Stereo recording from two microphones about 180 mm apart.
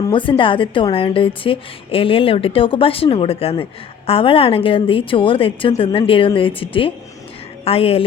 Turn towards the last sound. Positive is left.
turn(degrees=35)  # may be behind; listen again after turning